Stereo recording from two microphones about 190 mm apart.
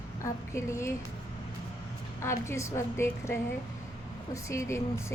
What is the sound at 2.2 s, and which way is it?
A woman's voice, 15° left (ahead or behind).